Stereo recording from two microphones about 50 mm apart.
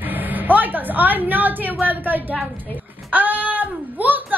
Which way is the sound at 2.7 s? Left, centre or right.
Right.